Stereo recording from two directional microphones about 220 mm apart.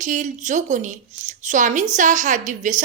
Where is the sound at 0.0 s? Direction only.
35° right (ahead or behind).